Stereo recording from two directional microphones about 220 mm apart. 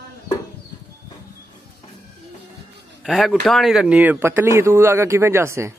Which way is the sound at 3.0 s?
Centre (ahead or behind).